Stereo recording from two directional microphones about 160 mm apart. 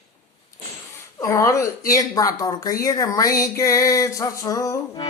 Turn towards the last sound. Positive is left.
turn(degrees=20)  # may be behind; listen again after turning